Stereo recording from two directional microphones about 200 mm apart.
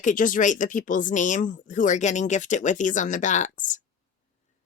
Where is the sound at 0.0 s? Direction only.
40° left (ahead or behind).